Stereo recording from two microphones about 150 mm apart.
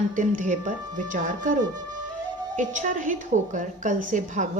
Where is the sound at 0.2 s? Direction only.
55° right (ahead or behind).